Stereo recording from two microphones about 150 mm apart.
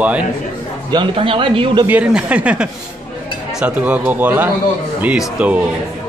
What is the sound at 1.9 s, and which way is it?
Speech, 10° right (ahead or behind).